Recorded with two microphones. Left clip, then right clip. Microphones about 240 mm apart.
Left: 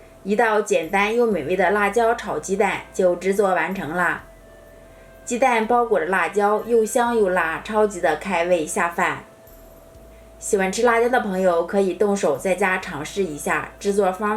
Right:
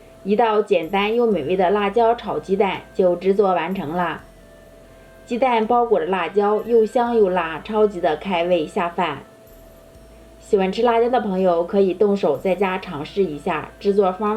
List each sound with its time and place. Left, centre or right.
0.3 s a woman's voice: left
5.4 s a woman's voice: left
10.5 s a woman's voice: left